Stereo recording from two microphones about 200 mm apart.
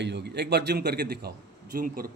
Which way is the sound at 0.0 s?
60° right (ahead or behind).